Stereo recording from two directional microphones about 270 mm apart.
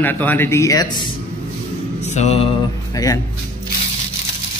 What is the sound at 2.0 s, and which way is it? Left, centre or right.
Mantra, left.